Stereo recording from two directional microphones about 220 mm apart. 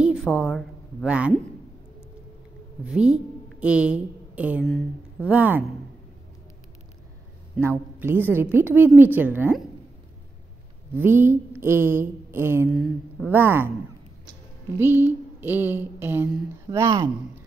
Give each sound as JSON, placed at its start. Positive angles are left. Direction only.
{"t": 0.0, "sound": "a woman's voice", "side_deg": -5}
{"t": 2.8, "sound": "a woman's voice", "side_deg": -5}
{"t": 7.5, "sound": "a woman's voice", "side_deg": -10}
{"t": 11.0, "sound": "a woman's voice", "side_deg": -10}
{"t": 12.7, "sound": "a woman's voice", "side_deg": 0}
{"t": 14.8, "sound": "a woman's voice", "side_deg": -10}